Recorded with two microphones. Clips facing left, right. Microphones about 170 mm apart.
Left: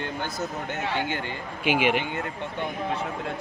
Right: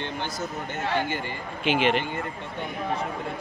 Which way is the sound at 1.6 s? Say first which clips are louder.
Even; 10° left (ahead or behind).